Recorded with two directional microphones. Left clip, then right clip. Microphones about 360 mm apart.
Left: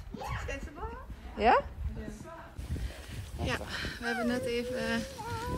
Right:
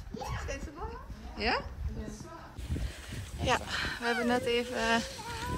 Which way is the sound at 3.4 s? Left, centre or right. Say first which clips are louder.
Right 5 dB; centre.